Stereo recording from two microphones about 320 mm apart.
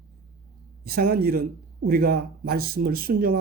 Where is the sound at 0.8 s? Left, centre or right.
Right.